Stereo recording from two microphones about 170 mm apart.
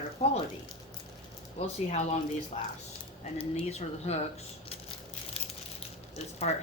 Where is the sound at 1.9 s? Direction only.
40° left (ahead or behind).